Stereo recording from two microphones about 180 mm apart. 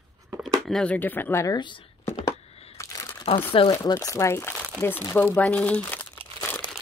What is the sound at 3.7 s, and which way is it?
Speech, 20° left (ahead or behind).